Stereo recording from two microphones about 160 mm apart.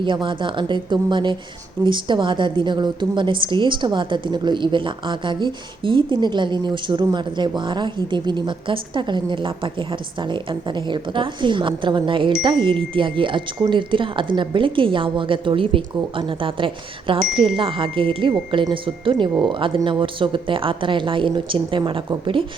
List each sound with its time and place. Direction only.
0.0 s a woman's voice: 30° right (ahead or behind)